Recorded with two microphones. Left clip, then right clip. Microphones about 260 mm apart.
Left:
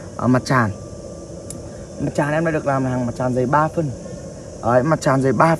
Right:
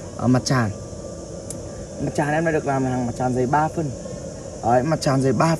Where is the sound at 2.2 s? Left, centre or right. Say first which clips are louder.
Left 1 dB; left.